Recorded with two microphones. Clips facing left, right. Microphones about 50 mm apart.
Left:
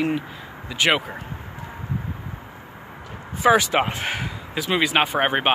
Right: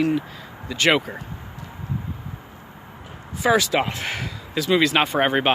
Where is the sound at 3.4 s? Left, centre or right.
Left.